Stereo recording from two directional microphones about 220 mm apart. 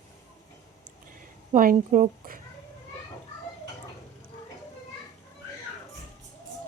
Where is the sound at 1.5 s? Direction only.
35° right (ahead or behind).